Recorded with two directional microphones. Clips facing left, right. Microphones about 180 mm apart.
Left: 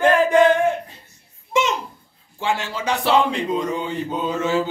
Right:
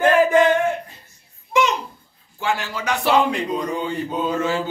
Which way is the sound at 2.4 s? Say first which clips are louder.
Left 1 dB; 30° left (ahead or behind).